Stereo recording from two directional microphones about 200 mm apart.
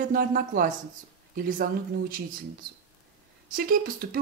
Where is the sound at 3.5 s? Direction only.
45° right (ahead or behind).